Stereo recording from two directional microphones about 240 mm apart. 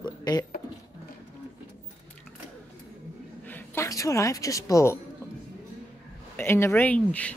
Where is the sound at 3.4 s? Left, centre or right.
Centre.